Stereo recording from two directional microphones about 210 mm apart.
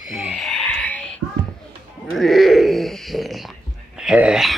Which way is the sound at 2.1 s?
Centre (ahead or behind).